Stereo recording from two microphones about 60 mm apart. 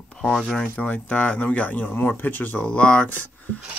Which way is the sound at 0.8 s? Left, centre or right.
Left.